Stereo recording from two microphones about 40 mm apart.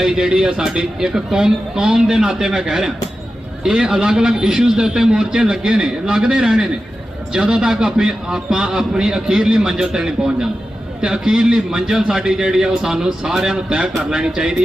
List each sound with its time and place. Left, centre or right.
0.0 s a man's voice: centre
13.7 s a man's voice: right